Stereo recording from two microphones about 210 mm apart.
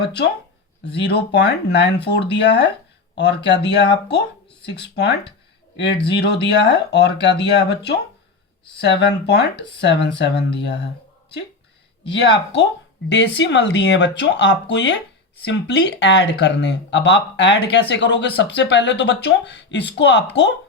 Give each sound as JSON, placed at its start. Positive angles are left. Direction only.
{"t": 0.9, "sound": "speech", "side_deg": 55}
{"t": 12.0, "sound": "speech", "side_deg": 55}